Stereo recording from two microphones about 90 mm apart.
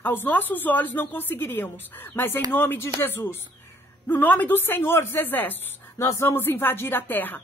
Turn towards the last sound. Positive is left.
turn(degrees=20)  # may be behind; listen again after turning